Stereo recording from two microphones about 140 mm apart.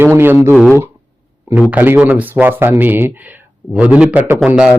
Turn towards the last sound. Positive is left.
turn(degrees=-5)  # may be behind; listen again after turning